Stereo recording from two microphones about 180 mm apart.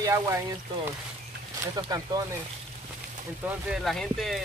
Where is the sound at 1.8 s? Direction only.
20° right (ahead or behind).